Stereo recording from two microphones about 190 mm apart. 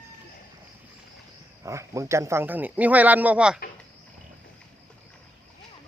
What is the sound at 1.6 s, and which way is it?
Speech, 15° right (ahead or behind).